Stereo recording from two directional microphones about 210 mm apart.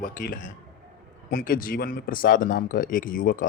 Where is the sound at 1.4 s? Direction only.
40° left (ahead or behind).